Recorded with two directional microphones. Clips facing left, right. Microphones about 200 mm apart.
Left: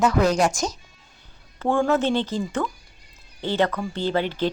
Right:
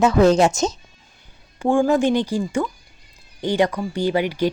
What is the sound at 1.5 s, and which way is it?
A woman's voice, 15° right (ahead or behind).